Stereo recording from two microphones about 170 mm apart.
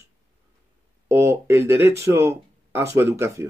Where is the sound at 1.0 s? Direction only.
15° right (ahead or behind).